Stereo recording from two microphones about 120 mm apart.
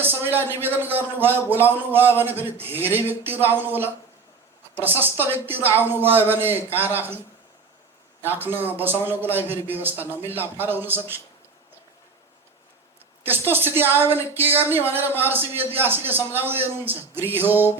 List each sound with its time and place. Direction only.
0.0 s a man's voice: 15° right (ahead or behind)
8.2 s a man's voice: 15° right (ahead or behind)
13.5 s a man's voice: 15° right (ahead or behind)